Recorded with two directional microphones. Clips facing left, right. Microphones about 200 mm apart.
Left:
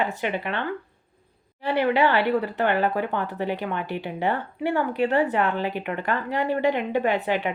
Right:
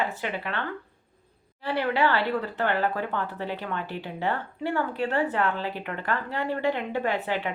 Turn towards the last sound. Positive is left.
turn(degrees=15)  # may be behind; listen again after turning